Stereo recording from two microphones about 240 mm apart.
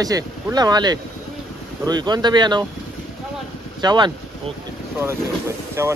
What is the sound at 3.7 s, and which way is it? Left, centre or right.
Speech, centre.